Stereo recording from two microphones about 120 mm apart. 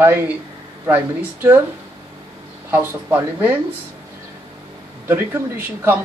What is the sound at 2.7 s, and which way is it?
Speech, 20° right (ahead or behind).